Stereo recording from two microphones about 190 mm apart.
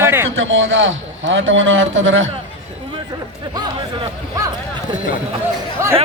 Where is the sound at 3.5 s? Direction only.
20° right (ahead or behind).